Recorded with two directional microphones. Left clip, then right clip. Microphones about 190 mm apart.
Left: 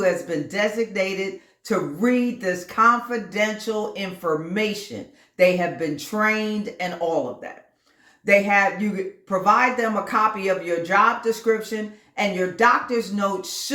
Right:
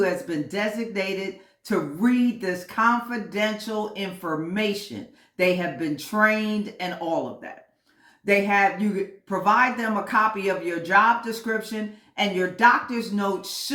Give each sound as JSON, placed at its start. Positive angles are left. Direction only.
{"t": 0.0, "sound": "speech", "side_deg": 10}
{"t": 8.2, "sound": "speech", "side_deg": 10}